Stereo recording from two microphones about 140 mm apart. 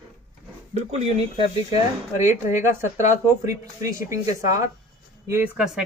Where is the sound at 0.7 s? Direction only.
50° right (ahead or behind).